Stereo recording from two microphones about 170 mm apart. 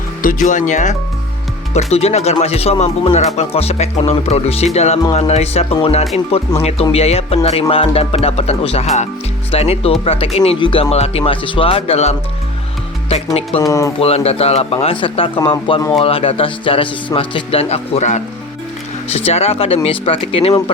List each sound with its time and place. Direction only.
0.2 s speech: 50° left (ahead or behind)
13.6 s speech: 20° left (ahead or behind)
14.0 s speech: 35° left (ahead or behind)